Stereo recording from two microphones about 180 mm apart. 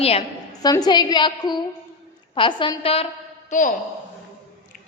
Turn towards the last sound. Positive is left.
turn(degrees=45)  # may be behind; listen again after turning